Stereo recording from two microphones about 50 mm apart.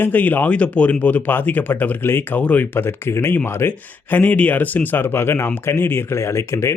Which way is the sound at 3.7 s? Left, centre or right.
Left.